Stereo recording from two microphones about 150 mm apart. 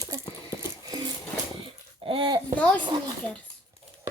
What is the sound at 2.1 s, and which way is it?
Speech, 30° right (ahead or behind).